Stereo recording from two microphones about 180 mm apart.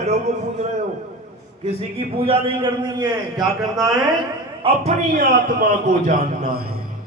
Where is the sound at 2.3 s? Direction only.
30° right (ahead or behind).